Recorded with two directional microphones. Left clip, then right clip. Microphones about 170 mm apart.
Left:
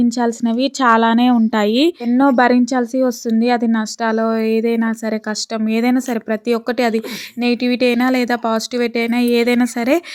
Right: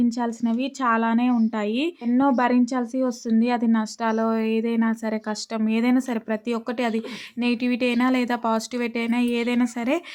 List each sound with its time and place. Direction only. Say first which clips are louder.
0.2 s a woman's voice: left 8 dB; 35° left (ahead or behind)